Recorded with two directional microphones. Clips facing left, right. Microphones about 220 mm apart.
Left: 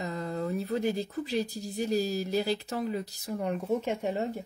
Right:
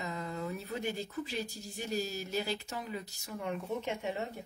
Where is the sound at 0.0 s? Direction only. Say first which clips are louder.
Left 5 dB; 35° left (ahead or behind).